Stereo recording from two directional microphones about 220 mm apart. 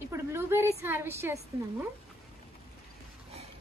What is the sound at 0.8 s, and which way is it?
Speech, 10° right (ahead or behind).